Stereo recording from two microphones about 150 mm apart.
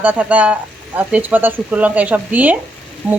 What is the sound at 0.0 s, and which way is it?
Speech, 10° right (ahead or behind).